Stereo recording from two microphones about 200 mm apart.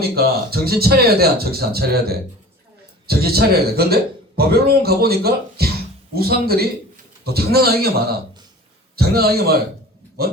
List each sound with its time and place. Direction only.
0.0 s a man's voice: 50° right (ahead or behind)